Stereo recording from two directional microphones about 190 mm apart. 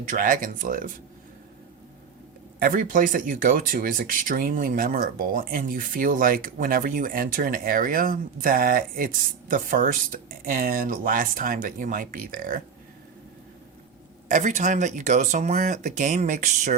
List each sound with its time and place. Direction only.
0.1 s speech: 45° right (ahead or behind)
2.6 s speech: 45° right (ahead or behind)
14.3 s speech: 40° right (ahead or behind)